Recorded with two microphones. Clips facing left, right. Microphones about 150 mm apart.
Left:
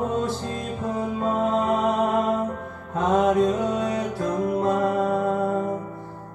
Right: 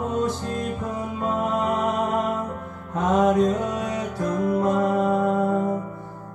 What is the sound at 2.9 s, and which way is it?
Music, 25° left (ahead or behind).